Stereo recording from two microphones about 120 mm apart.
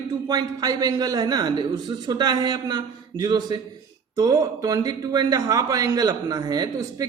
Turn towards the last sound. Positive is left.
turn(degrees=-30)  # may be behind; listen again after turning